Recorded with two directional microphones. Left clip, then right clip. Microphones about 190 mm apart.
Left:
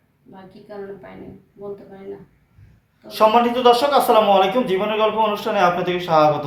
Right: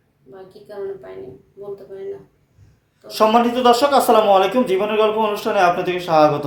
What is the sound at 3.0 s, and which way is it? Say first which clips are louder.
Speech: even; 45° right (ahead or behind).